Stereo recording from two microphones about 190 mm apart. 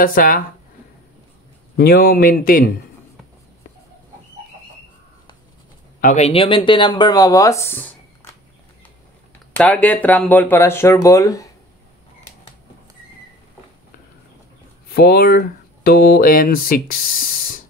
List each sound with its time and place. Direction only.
0.0 s speech: 50° left (ahead or behind)
1.8 s speech: 50° left (ahead or behind)
5.9 s speech: 40° left (ahead or behind); by 8.3 s 10° left (ahead or behind)
9.6 s speech: 5° left (ahead or behind)
14.9 s speech: 55° left (ahead or behind)